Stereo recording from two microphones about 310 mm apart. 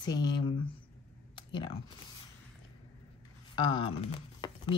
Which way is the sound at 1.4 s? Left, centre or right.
Centre.